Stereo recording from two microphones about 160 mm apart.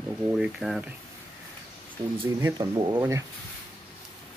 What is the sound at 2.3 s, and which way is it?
Speech, 20° right (ahead or behind).